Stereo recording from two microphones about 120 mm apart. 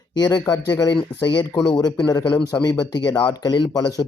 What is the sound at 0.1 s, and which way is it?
Speech, 35° left (ahead or behind).